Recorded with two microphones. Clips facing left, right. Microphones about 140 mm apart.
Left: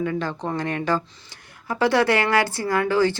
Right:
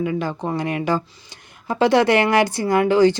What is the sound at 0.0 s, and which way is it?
Speech, 10° right (ahead or behind).